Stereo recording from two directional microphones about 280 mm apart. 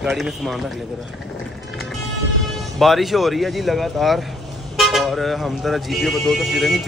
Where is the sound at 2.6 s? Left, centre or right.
Centre.